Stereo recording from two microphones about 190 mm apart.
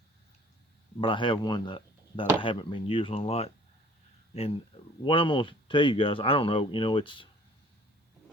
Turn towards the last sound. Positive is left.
turn(degrees=25)  # may be behind; listen again after turning